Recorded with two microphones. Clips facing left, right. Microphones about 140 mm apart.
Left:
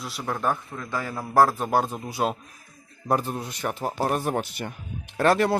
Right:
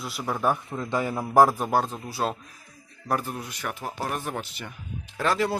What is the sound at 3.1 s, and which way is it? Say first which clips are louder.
Speech: left 3 dB; 25° left (ahead or behind).